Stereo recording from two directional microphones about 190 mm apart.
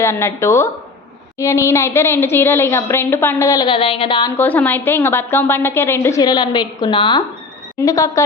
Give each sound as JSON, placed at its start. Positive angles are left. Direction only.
{"t": 0.0, "sound": "a woman's voice", "side_deg": 15}
{"t": 4.3, "sound": "a woman's voice", "side_deg": 10}